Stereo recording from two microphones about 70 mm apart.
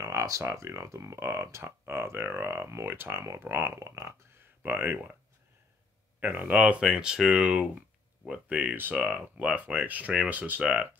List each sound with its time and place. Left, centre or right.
0.0 s speech: right
4.6 s speech: right
6.1 s speech: right